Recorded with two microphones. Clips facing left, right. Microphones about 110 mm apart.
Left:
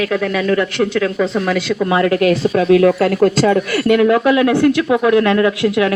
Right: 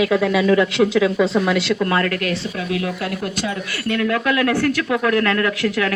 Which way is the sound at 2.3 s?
40° left (ahead or behind).